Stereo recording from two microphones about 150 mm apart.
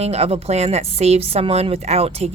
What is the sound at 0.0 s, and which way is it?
Speech, 45° right (ahead or behind).